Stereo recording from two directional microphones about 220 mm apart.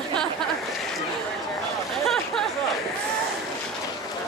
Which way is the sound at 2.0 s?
Centre (ahead or behind).